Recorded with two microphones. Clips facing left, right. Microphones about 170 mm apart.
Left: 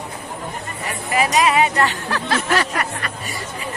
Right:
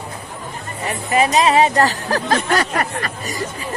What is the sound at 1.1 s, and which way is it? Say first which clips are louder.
Speech: right 3 dB; 30° right (ahead or behind).